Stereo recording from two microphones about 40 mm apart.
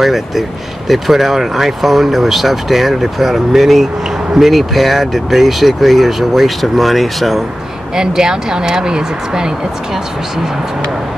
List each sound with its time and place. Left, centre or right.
0.0 s speech: centre
7.9 s speech: centre